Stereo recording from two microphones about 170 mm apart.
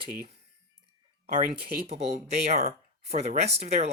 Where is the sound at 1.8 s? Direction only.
40° right (ahead or behind).